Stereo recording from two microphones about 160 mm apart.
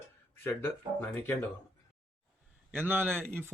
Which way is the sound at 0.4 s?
15° left (ahead or behind).